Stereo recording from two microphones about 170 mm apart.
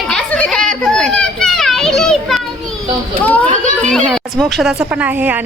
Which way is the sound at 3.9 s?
Centre (ahead or behind).